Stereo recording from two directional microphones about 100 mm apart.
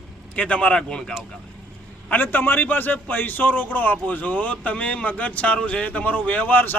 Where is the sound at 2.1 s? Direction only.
20° left (ahead or behind).